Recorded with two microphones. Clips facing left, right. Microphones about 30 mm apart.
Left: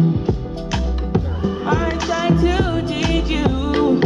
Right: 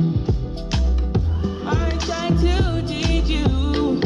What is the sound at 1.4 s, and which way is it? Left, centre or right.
Music, left.